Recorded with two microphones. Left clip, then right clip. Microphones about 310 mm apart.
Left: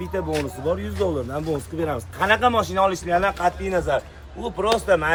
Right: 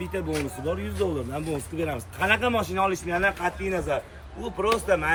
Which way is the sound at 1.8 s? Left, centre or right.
Centre.